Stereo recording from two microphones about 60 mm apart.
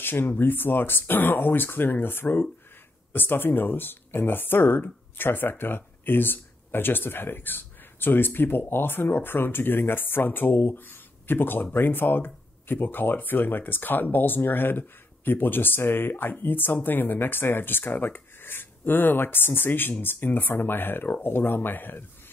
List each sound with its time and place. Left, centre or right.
0.0 s speech: left